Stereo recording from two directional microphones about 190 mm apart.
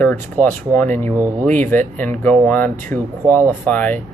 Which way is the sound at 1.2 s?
15° right (ahead or behind).